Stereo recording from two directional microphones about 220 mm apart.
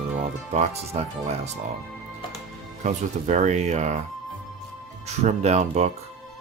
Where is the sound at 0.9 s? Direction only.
30° right (ahead or behind).